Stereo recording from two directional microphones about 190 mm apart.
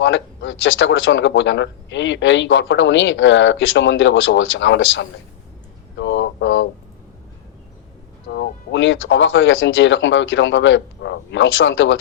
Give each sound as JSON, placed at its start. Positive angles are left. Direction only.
{"t": 0.0, "sound": "speech", "side_deg": 90}
{"t": 6.0, "sound": "a sound", "side_deg": 70}
{"t": 8.3, "sound": "speech", "side_deg": 65}